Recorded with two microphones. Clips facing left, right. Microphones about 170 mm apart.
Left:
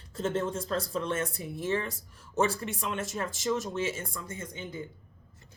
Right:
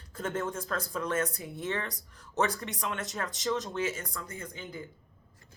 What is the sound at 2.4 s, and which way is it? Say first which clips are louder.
Speech: left 2 dB; 25° left (ahead or behind).